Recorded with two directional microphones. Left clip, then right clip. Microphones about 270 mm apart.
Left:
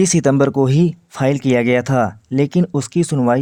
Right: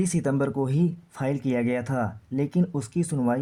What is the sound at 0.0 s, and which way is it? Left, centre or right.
Speech, left.